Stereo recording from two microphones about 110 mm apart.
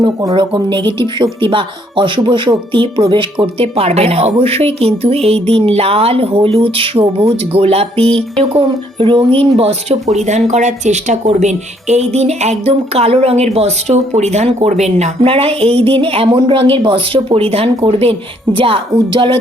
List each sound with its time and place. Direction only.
0.0 s speech: 40° right (ahead or behind); by 7.3 s 55° right (ahead or behind)
7.5 s speech: 65° right (ahead or behind)
8.4 s speech: 55° right (ahead or behind)
9.6 s speech: 75° right (ahead or behind); by 18.8 s 55° right (ahead or behind)